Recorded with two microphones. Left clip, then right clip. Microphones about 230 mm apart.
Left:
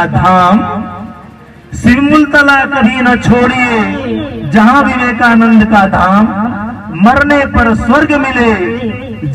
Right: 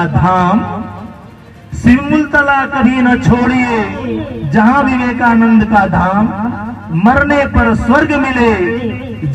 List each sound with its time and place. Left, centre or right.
0.0 s a man's voice: left
1.8 s a man's voice: left